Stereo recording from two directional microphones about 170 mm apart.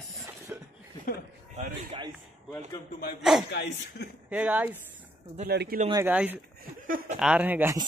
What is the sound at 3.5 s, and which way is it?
Speech, 80° left.